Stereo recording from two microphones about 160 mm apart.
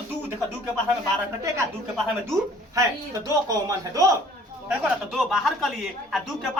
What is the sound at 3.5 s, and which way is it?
Speech, 20° right (ahead or behind).